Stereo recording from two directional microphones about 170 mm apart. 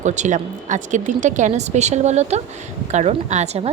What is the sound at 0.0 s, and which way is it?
A woman's voice, 45° right (ahead or behind).